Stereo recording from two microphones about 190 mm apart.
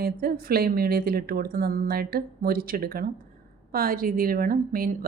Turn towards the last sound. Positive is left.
turn(degrees=-50)  # may be behind; listen again after turning